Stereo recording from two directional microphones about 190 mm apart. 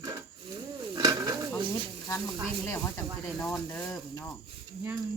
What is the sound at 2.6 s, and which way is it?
Cricket, 15° left (ahead or behind).